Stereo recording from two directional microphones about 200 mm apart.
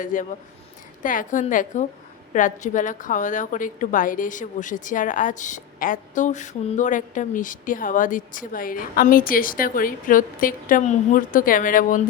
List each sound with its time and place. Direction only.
0.0 s a woman's voice: 40° left (ahead or behind)